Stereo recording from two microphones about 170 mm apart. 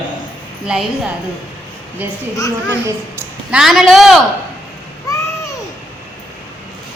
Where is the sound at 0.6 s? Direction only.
5° right (ahead or behind).